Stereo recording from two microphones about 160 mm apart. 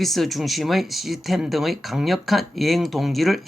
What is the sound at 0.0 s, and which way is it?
Speech, centre (ahead or behind).